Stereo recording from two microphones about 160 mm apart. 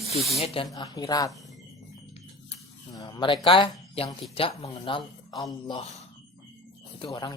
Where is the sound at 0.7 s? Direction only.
25° left (ahead or behind).